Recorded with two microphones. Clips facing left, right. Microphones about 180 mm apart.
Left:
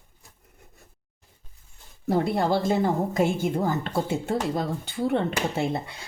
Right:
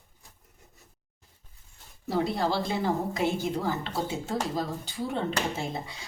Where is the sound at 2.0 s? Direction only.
55° left (ahead or behind).